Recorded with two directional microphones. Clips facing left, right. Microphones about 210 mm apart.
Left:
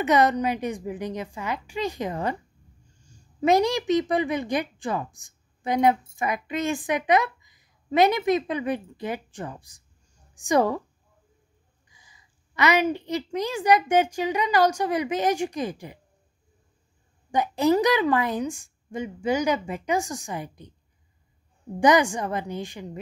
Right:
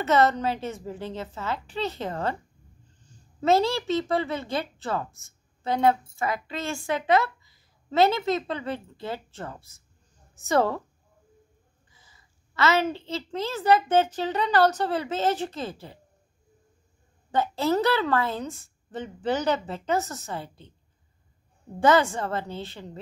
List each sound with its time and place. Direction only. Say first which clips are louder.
0.0 s a woman's voice: left 1 dB; 15° left (ahead or behind)
11.9 s a woman's voice: left 1 dB; 15° left (ahead or behind)
17.3 s a woman's voice: left 3 dB; 15° left (ahead or behind)
21.7 s a woman's voice: left 1 dB; 15° left (ahead or behind)